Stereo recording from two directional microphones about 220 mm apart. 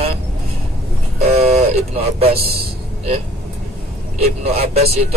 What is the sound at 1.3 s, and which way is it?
Vehicle, 30° right (ahead or behind).